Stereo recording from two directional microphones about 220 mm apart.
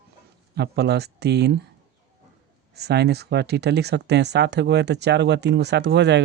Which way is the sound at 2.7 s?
50° right (ahead or behind).